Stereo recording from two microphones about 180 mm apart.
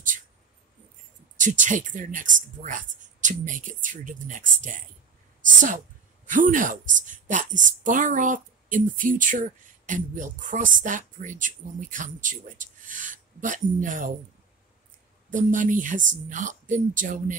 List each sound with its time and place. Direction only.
1.4 s a woman's voice: 45° right (ahead or behind)
6.2 s a woman's voice: 45° right (ahead or behind)
15.3 s a woman's voice: 45° right (ahead or behind)